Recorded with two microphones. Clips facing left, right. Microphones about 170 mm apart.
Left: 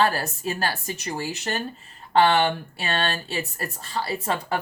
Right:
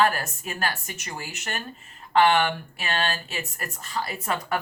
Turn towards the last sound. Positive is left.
turn(degrees=30)  # may be behind; listen again after turning